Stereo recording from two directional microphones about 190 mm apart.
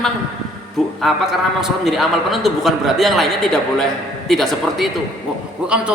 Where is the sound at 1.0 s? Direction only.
Centre (ahead or behind).